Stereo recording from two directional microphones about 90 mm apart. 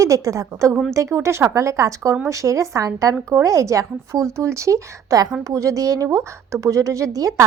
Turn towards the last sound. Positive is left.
turn(degrees=-35)  # may be behind; listen again after turning